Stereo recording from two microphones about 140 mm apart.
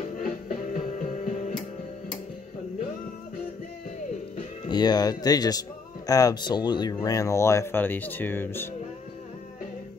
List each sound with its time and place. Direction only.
0.5 s music: 60° left (ahead or behind)
4.6 s speech: 30° left (ahead or behind)